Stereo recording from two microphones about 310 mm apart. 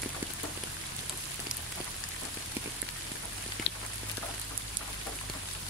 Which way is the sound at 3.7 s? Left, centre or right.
Left.